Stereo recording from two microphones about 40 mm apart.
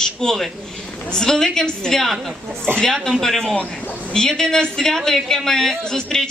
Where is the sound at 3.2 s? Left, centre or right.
Centre.